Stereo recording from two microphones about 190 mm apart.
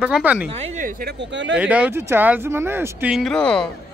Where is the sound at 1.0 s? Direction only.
70° right (ahead or behind).